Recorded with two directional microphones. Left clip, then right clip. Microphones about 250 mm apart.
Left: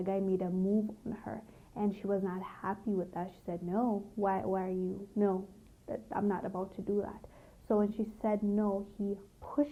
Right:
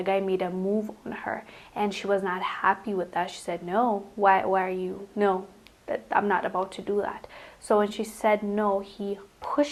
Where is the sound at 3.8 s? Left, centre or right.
Right.